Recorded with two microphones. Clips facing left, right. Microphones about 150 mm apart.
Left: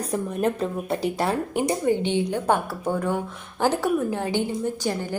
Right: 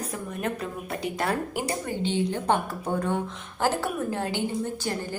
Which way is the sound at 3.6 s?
15° left (ahead or behind).